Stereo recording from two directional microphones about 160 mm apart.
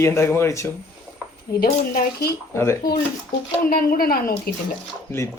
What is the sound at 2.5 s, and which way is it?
Speech, 15° left (ahead or behind).